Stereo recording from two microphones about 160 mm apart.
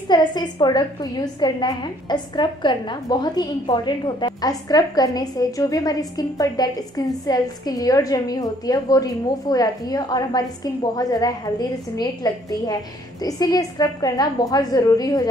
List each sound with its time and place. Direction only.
0.1 s a woman's voice: 25° left (ahead or behind)